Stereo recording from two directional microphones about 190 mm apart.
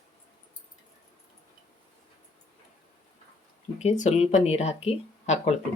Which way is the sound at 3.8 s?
40° left (ahead or behind).